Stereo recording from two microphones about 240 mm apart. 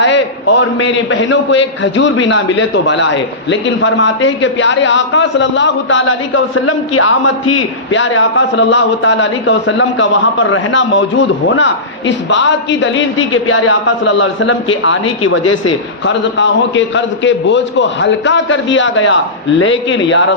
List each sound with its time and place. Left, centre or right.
0.0 s a man's voice: left